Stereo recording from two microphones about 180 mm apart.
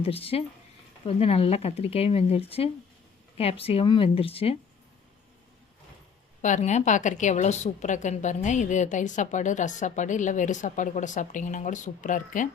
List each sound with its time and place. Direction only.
0.0 s speech: 30° left (ahead or behind)
6.4 s a woman's voice: 40° left (ahead or behind)